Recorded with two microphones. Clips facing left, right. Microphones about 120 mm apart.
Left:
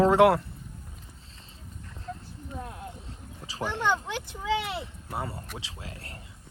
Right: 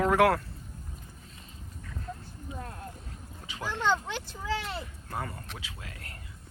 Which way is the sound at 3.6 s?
20° left (ahead or behind).